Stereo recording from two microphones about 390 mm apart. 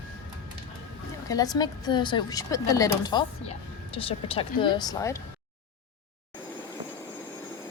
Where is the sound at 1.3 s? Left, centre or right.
Centre.